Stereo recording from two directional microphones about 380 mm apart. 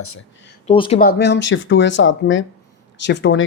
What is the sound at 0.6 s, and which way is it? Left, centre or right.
Speech, centre.